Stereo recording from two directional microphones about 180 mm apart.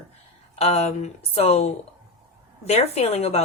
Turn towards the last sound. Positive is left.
turn(degrees=35)  # may be behind; listen again after turning